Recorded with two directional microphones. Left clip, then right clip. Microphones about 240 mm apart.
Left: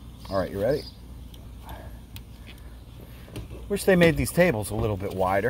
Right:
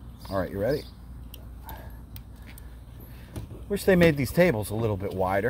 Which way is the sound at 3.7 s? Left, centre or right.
Centre.